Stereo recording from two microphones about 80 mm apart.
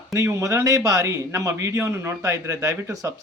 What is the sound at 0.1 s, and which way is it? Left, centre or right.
Speech, right.